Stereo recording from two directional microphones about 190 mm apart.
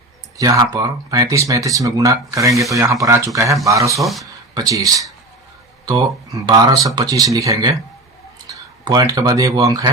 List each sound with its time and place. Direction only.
0.3 s speech: 20° right (ahead or behind)
4.0 s speech: centre (ahead or behind)
4.5 s speech: 20° right (ahead or behind)
8.4 s clicking: 20° right (ahead or behind)
9.1 s speech: 20° right (ahead or behind)